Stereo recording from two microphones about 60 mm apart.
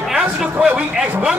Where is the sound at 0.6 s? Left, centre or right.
Right.